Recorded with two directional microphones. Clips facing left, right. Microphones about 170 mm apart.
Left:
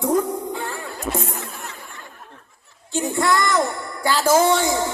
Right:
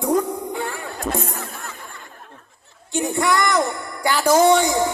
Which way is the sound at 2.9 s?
15° right (ahead or behind).